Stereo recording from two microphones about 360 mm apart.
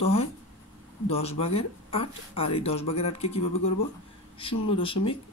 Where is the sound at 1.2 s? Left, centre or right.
Centre.